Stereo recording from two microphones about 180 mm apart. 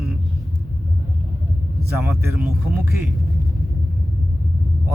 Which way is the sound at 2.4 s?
10° right (ahead or behind).